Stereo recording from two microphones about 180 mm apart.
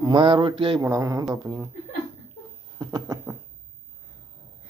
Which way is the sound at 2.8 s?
20° right (ahead or behind).